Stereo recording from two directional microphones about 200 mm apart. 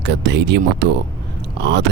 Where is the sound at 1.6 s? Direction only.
60° right (ahead or behind).